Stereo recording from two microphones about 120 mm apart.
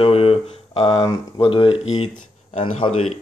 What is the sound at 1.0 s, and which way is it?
Speech, 30° left (ahead or behind).